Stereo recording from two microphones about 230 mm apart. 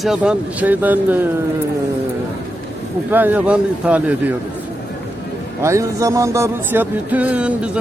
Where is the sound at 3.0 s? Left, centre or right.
Centre.